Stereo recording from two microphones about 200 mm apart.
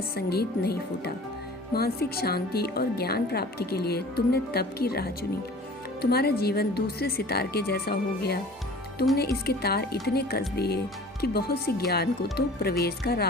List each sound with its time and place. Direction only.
0.2 s a woman's voice: 50° left (ahead or behind)